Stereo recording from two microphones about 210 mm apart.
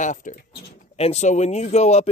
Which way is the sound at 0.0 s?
35° left (ahead or behind).